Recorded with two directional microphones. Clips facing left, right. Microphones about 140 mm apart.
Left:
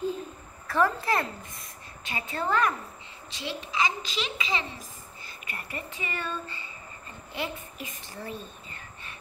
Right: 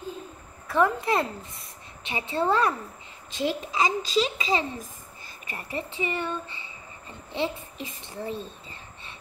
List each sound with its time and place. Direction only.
0.7 s a woman's voice: 15° right (ahead or behind)
3.3 s a child's voice: 45° right (ahead or behind)
5.5 s a woman's voice: 30° right (ahead or behind)